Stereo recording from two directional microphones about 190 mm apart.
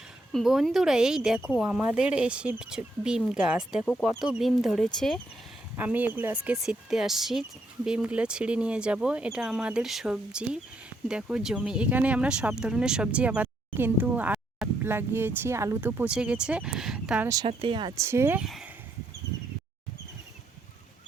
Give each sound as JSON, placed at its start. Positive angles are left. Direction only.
{"t": 0.3, "sound": "speech", "side_deg": 0}
{"t": 5.7, "sound": "speech", "side_deg": -10}
{"t": 17.4, "sound": "speech", "side_deg": -25}
{"t": 18.1, "sound": "speech", "side_deg": -10}
{"t": 18.4, "sound": "speech", "side_deg": 0}